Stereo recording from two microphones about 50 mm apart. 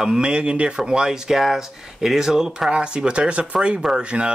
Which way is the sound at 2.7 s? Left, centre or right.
Centre.